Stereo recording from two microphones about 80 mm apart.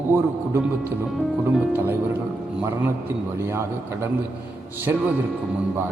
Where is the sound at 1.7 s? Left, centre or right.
Right.